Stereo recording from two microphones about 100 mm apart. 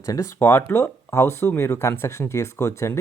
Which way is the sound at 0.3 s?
20° left (ahead or behind).